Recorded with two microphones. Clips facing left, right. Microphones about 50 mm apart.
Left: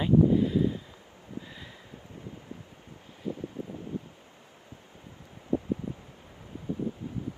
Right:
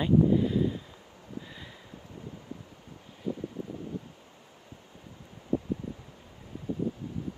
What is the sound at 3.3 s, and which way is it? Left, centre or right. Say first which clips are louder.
Wind noise: right 1 dB; left.